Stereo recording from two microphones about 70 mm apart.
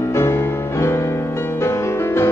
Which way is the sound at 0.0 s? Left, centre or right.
Left.